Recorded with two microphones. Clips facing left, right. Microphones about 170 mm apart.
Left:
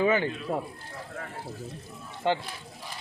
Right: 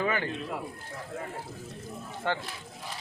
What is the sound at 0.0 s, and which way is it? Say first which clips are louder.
Speech: left 5 dB; 20° left (ahead or behind).